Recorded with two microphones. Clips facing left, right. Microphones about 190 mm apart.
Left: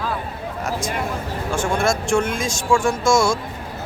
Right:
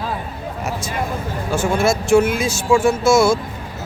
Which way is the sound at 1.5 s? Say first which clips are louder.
Right 3 dB; 5° right (ahead or behind).